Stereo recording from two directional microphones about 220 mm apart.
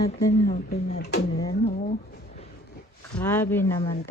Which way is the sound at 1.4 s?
20° left (ahead or behind).